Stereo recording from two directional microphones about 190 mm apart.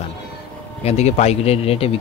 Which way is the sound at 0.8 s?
35° left (ahead or behind).